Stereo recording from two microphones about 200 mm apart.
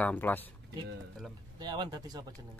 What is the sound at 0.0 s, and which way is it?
Speech, 10° left (ahead or behind).